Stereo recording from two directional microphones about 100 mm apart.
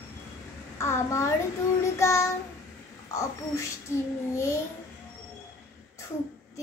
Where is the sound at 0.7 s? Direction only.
25° left (ahead or behind).